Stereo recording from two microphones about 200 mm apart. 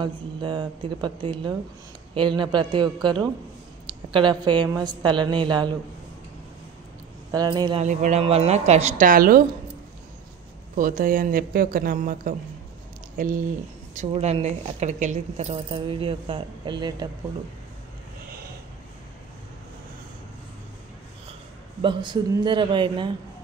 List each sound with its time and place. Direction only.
0.0 s speech: 25° right (ahead or behind)
7.2 s speech: 20° right (ahead or behind)
7.8 s a woman's voice: 35° right (ahead or behind)
10.8 s speech: 45° right (ahead or behind)
13.9 s speech: 30° right (ahead or behind)
21.8 s speech: 20° right (ahead or behind)